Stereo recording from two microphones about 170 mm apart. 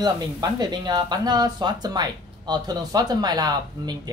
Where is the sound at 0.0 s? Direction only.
25° right (ahead or behind).